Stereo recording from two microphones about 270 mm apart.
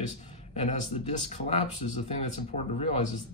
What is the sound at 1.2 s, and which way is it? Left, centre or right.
Speech, left.